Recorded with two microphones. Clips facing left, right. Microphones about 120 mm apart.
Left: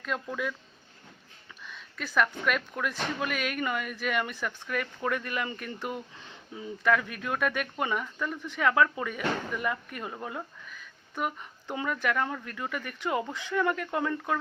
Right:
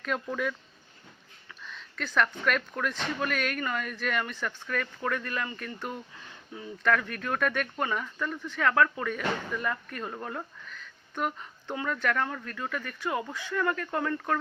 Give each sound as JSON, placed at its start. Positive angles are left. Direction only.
{"t": 0.0, "sound": "speech", "side_deg": 0}
{"t": 1.6, "sound": "speech", "side_deg": 10}